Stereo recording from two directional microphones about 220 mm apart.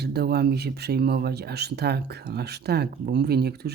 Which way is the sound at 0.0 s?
45° right (ahead or behind).